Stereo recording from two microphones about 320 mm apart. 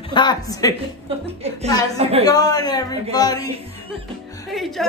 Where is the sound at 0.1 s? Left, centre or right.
Centre.